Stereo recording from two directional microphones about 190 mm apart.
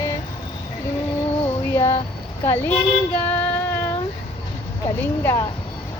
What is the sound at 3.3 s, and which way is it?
Female singing, 10° left (ahead or behind).